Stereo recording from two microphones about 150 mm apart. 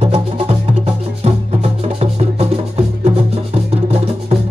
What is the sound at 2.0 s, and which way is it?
Music, 45° right (ahead or behind).